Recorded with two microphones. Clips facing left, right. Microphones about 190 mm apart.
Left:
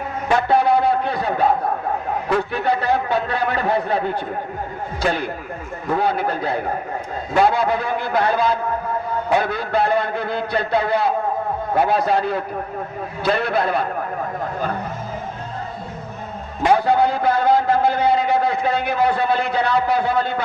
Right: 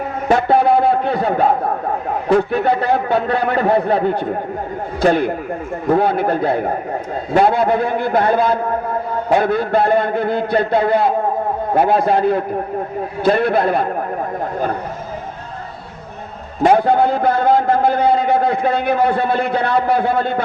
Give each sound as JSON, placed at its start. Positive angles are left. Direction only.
{"t": 0.3, "sound": "a sound", "side_deg": -55}
{"t": 2.5, "sound": "a man's voice", "side_deg": -55}
{"t": 16.7, "sound": "a man's voice", "side_deg": -55}